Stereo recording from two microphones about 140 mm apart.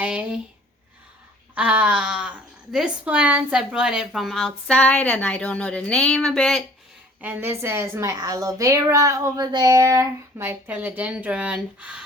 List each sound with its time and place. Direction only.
0.0 s a sound: 10° right (ahead or behind)
1.5 s speech: 10° right (ahead or behind)
7.2 s a woman's voice: 15° right (ahead or behind)